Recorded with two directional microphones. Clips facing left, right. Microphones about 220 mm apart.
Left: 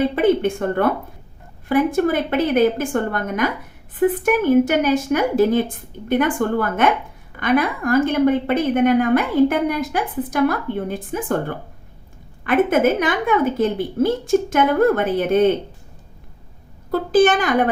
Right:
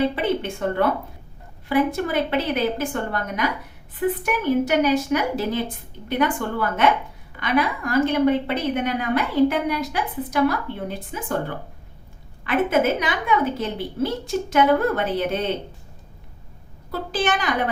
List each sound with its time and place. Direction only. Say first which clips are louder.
0.2 s a woman's voice: left 7 dB; 50° left (ahead or behind)
16.9 s a woman's voice: left 9 dB; 45° left (ahead or behind)